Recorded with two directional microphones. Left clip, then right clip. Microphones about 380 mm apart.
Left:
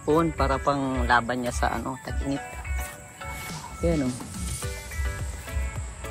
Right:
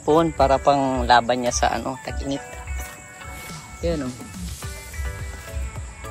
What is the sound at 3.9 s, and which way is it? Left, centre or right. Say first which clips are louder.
Speech: right 1 dB; centre.